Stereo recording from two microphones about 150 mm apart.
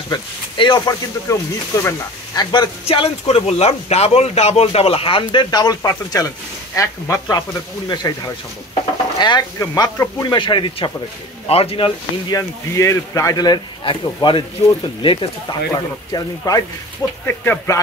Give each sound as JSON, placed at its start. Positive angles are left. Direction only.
{"t": 0.1, "sound": "speech", "side_deg": 30}
{"t": 2.5, "sound": "speech", "side_deg": 35}
{"t": 10.3, "sound": "speech", "side_deg": 30}
{"t": 12.4, "sound": "speech", "side_deg": 20}
{"t": 15.7, "sound": "speech", "side_deg": 25}